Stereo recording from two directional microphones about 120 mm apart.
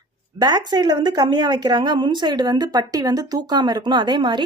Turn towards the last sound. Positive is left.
turn(degrees=-40)  # may be behind; listen again after turning